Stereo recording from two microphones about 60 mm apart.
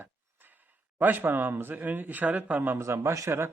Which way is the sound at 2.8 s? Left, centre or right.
Right.